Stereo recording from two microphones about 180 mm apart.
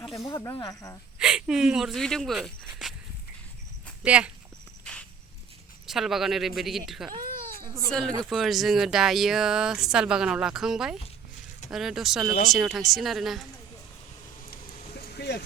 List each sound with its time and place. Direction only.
0.0 s snake: centre (ahead or behind)
0.3 s speech: 15° left (ahead or behind)
1.2 s speech: 5° right (ahead or behind)
4.0 s speech: 5° right (ahead or behind)
5.8 s speech: centre (ahead or behind)
7.2 s baby cry: 55° right (ahead or behind)
7.9 s speech: centre (ahead or behind)
14.5 s a sound: 55° left (ahead or behind)